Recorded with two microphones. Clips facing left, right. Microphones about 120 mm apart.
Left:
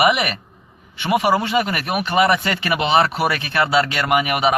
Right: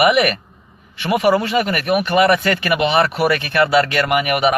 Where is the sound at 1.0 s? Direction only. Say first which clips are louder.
Right 2 dB; 30° left (ahead or behind).